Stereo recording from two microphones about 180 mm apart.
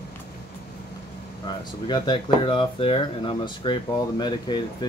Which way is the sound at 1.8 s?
25° left (ahead or behind).